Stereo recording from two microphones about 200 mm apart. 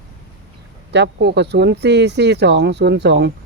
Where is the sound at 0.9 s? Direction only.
55° right (ahead or behind).